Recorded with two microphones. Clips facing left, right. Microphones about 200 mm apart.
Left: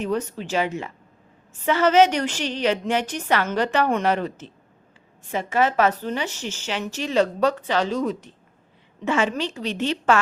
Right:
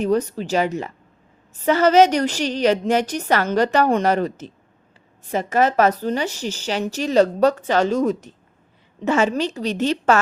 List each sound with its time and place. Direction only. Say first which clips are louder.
0.0 s a woman's voice: right 5 dB; 40° right (ahead or behind)